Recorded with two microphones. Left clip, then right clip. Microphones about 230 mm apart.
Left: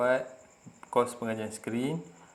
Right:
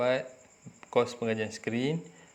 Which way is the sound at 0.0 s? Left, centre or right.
Right.